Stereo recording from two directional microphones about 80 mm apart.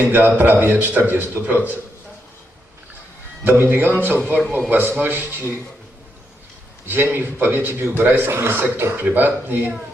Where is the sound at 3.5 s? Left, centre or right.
Right.